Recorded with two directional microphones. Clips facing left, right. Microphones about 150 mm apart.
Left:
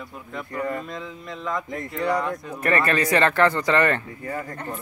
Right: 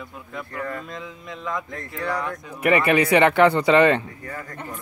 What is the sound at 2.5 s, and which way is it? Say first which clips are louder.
A man's voice: right 4 dB; 15° right (ahead or behind).